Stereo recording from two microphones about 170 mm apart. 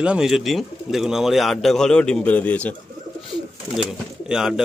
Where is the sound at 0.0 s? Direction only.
5° right (ahead or behind).